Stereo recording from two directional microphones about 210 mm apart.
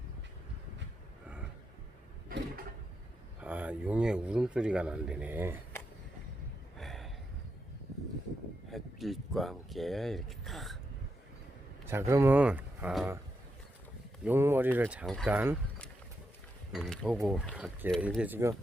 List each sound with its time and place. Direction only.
2.3 s mechanisms: 45° right (ahead or behind)
3.4 s speech: 5° right (ahead or behind)
6.7 s a sound: centre (ahead or behind)
8.7 s speech: centre (ahead or behind)
11.9 s speech: 10° right (ahead or behind)
14.3 s speech: 10° right (ahead or behind)
16.7 s speech: centre (ahead or behind)